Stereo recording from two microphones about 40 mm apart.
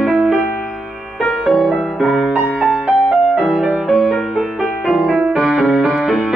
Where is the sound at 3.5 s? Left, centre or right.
Right.